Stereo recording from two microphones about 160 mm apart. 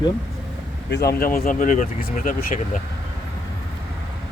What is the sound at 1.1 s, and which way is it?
Speech, 65° left (ahead or behind).